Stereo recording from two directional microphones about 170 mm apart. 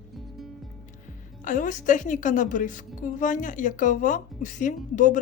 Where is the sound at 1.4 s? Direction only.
50° left (ahead or behind).